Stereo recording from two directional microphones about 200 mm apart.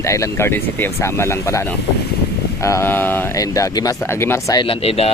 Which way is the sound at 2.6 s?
15° left (ahead or behind).